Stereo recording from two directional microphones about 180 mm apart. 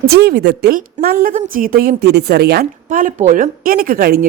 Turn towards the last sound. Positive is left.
turn(degrees=-55)  # may be behind; listen again after turning